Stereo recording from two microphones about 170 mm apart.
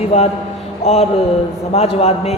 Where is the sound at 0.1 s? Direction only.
35° left (ahead or behind).